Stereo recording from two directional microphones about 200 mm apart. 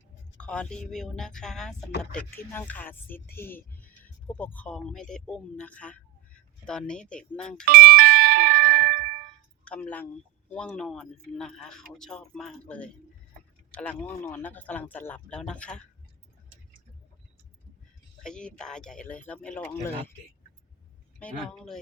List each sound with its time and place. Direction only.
0.4 s speech: 5° left (ahead or behind)
7.6 s doorbell: 45° right (ahead or behind)
9.6 s a man's voice: 5° left (ahead or behind)
18.2 s speech: 5° left (ahead or behind)
21.2 s speech: 5° left (ahead or behind)